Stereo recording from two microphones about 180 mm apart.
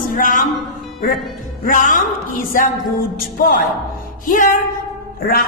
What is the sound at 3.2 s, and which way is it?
Music, 55° left (ahead or behind).